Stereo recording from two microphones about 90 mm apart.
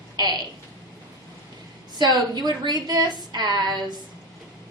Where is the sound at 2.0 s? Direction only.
50° right (ahead or behind).